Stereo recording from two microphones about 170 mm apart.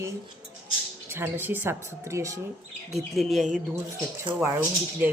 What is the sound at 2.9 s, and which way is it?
Speech, centre (ahead or behind).